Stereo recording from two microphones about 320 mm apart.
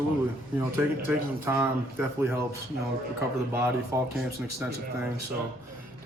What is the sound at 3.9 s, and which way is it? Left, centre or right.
Speech, centre.